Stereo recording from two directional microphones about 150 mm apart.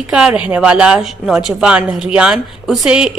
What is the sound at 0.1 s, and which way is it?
A woman's voice, 5° right (ahead or behind).